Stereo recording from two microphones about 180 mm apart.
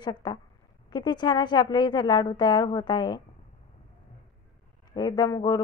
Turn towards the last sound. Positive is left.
turn(degrees=20)  # may be behind; listen again after turning